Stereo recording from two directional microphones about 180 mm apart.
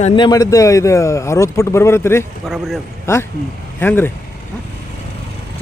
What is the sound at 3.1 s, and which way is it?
A man's voice, 15° left (ahead or behind).